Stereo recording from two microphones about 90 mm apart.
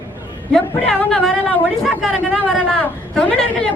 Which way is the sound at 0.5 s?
5° left (ahead or behind).